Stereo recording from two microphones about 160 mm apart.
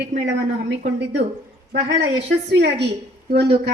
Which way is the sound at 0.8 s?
90° right.